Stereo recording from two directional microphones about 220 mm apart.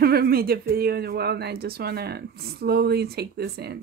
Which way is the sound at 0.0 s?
45° right (ahead or behind).